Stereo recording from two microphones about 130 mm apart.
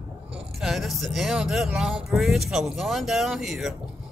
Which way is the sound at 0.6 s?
Centre (ahead or behind).